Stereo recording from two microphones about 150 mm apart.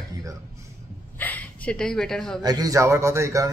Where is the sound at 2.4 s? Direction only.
25° right (ahead or behind).